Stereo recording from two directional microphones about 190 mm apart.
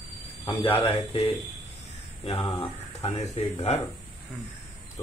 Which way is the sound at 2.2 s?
30° left (ahead or behind).